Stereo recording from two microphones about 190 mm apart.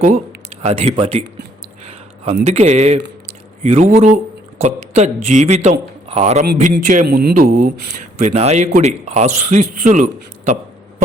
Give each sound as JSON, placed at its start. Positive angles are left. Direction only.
{"t": 0.6, "sound": "a man's voice", "side_deg": -35}
{"t": 2.4, "sound": "a man's voice", "side_deg": -35}
{"t": 6.4, "sound": "a man's voice", "side_deg": -45}
{"t": 8.2, "sound": "a man's voice", "side_deg": -35}